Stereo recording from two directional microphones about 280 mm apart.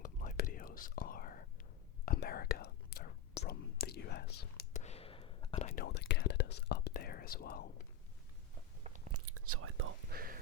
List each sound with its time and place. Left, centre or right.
0.0 s whispering: left
5.8 s whispering: left
9.1 s whispering: right
10.2 s a sound: right